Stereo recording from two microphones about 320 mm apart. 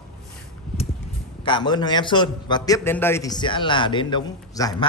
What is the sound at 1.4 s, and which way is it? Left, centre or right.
Speech, centre.